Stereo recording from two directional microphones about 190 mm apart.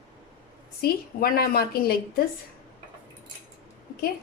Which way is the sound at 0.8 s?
50° left (ahead or behind).